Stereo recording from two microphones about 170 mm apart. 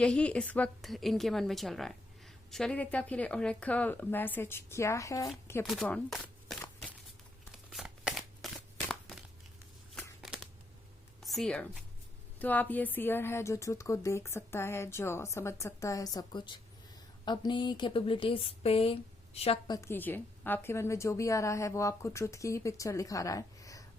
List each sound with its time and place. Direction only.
0.0 s a woman's voice: 5° left (ahead or behind)
5.6 s speech: 5° left (ahead or behind)
7.5 s a sound: centre (ahead or behind)
8.9 s crumpling: centre (ahead or behind)
9.9 s a sound: centre (ahead or behind)
11.2 s a woman's voice: centre (ahead or behind); by 19.7 s 35° left (ahead or behind)
19.7 s a woman's voice: 15° left (ahead or behind)